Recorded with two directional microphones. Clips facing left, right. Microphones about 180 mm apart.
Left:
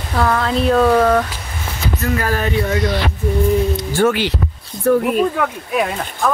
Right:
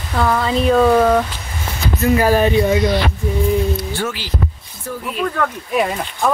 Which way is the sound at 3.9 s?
60° left (ahead or behind).